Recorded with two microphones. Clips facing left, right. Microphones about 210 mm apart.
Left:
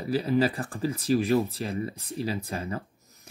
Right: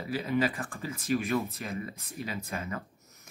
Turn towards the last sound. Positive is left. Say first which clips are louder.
# left 3 dB
turn(degrees=30)  # may be behind; listen again after turning